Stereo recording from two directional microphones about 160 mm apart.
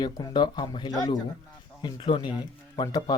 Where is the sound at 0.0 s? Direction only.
25° left (ahead or behind).